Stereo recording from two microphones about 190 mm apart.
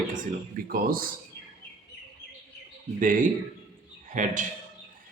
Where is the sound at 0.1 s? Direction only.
45° right (ahead or behind).